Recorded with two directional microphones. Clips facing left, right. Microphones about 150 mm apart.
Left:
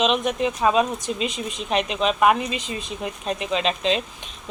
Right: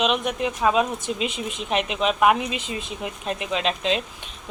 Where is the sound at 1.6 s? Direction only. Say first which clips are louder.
Left 1 dB; 10° right (ahead or behind).